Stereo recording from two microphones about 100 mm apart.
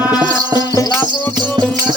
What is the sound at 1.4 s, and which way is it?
Music, 45° right (ahead or behind).